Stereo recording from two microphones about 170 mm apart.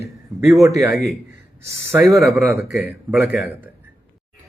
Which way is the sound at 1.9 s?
20° right (ahead or behind).